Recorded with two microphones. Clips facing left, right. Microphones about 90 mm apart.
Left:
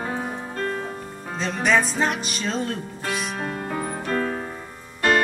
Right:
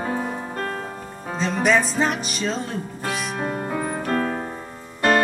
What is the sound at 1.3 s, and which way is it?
Music, 5° right (ahead or behind).